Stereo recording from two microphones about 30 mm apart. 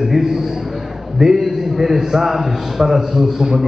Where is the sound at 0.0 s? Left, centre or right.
Centre.